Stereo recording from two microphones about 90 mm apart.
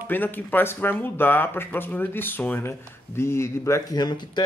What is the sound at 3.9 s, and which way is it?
Speech, 50° left (ahead or behind).